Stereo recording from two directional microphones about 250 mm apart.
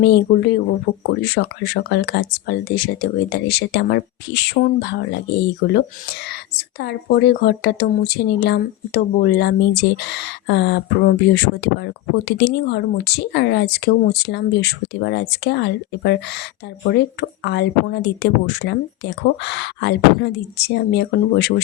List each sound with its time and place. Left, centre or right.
1.2 s a woman's voice: left